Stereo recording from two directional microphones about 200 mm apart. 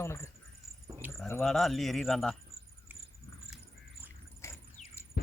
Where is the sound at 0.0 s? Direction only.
10° left (ahead or behind).